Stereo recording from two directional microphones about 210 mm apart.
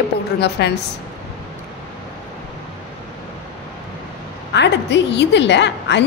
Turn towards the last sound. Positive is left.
turn(degrees=55)  # may be behind; listen again after turning